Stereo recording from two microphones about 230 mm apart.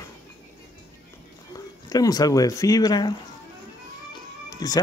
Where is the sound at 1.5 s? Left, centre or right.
Centre.